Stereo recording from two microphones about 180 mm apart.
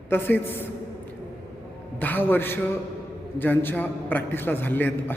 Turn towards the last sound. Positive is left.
turn(degrees=10)  # may be behind; listen again after turning